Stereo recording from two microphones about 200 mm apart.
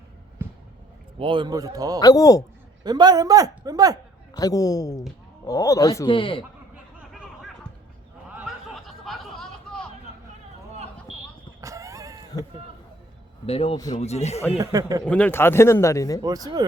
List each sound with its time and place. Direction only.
0.4 s basketball bounce: 10° right (ahead or behind)
1.2 s a man's voice: 25° right (ahead or behind)
2.0 s speech: 20° left (ahead or behind)
2.8 s a man's voice: 20° right (ahead or behind)
4.4 s speech: 20° left (ahead or behind)
7.1 s a sound: centre (ahead or behind)
11.6 s cat: 15° right (ahead or behind)
13.4 s speech: 30° left (ahead or behind)
14.6 s a man's voice: 15° right (ahead or behind)
15.0 s speech: 5° left (ahead or behind)
16.2 s a man's voice: 20° right (ahead or behind)